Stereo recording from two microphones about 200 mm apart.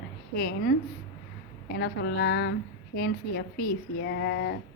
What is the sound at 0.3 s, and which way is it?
Mantra, 50° left (ahead or behind).